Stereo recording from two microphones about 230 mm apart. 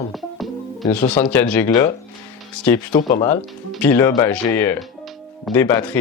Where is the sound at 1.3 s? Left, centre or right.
Centre.